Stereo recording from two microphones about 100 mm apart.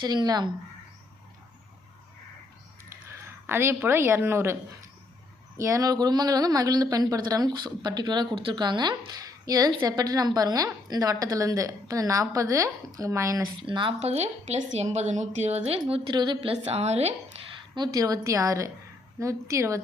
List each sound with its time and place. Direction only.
0.0 s speech: 45° right (ahead or behind)
3.4 s a woman's voice: 25° right (ahead or behind)
5.5 s a woman's voice: 30° right (ahead or behind)
13.6 s speech: 55° right (ahead or behind)
14.0 s speech: 90° right
15.4 s a woman's voice: 85° right
16.1 s speech: 45° right (ahead or behind)
16.4 s a woman's voice: 90° right
17.7 s a woman's voice: 40° right (ahead or behind)